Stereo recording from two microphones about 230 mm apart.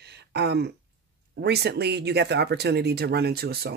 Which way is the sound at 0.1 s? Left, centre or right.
Right.